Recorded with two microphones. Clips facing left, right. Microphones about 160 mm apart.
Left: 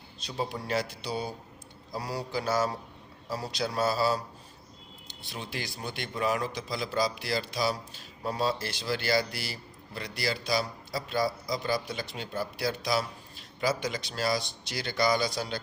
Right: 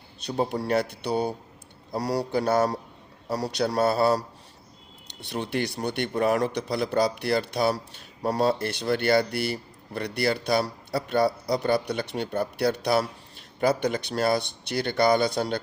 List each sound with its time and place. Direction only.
0.3 s a man's voice: 55° right (ahead or behind)
5.3 s a man's voice: 65° right (ahead or behind)